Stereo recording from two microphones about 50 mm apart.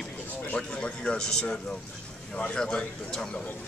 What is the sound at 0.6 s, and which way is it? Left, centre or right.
Speech, centre.